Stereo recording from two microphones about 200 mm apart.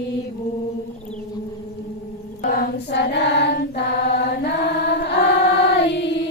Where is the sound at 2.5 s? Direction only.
55° left (ahead or behind).